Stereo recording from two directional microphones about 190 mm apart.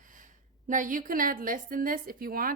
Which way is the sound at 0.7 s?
45° right (ahead or behind).